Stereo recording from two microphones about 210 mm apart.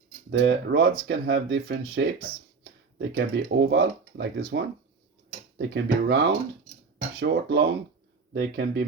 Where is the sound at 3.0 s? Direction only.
55° right (ahead or behind).